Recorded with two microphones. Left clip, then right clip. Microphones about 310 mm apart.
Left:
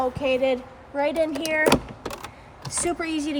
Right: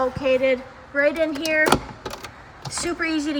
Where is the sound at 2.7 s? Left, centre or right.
Left.